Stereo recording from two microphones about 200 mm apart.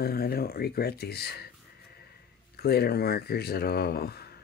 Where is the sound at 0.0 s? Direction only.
50° left (ahead or behind).